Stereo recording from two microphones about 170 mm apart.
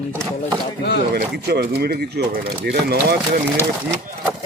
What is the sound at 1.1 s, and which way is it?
Speech, 70° right (ahead or behind).